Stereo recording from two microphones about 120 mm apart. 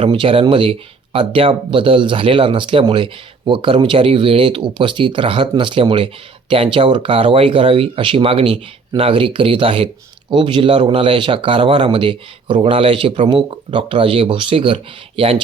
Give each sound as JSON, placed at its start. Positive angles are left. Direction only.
{"t": 0.0, "sound": "speech", "side_deg": -50}